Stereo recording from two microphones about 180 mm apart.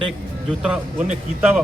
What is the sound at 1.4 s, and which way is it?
Speech, 10° right (ahead or behind).